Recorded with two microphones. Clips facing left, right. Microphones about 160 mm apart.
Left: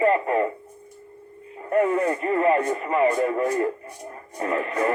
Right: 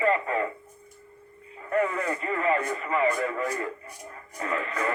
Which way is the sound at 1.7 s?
20° left (ahead or behind).